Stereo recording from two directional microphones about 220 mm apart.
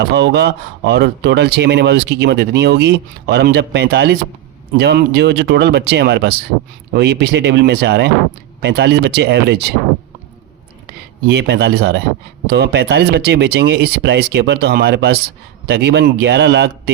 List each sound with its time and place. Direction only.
0.0 s speech: 50° right (ahead or behind)
11.3 s speech: 50° right (ahead or behind)